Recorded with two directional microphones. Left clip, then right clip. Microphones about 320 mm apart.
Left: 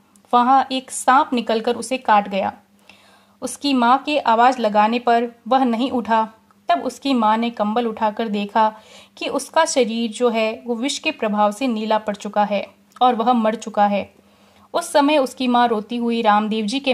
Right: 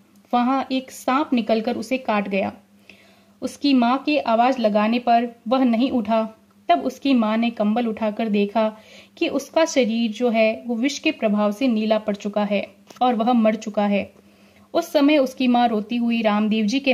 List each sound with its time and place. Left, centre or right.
0.3 s a woman's voice: left